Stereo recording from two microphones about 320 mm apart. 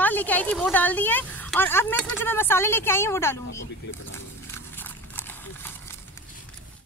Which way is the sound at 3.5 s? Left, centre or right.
Left.